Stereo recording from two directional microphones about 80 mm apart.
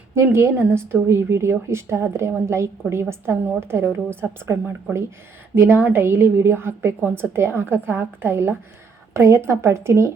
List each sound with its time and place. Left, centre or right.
0.1 s a woman's voice: right
9.1 s a woman's voice: right